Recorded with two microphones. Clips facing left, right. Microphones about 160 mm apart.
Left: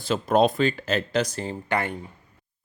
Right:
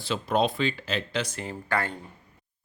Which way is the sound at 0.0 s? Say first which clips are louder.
Left 5 dB; 45° left (ahead or behind).